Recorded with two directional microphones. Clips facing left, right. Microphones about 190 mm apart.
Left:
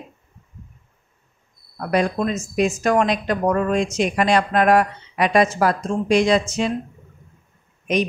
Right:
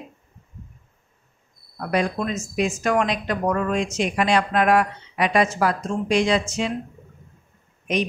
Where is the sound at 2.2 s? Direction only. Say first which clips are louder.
Left 4 dB; 40° left (ahead or behind).